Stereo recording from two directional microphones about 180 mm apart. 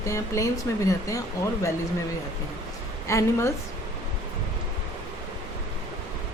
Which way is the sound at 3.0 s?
15° left (ahead or behind).